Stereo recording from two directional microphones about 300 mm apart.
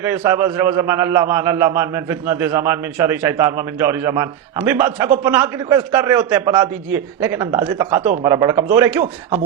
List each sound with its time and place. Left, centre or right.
0.0 s a man's voice: centre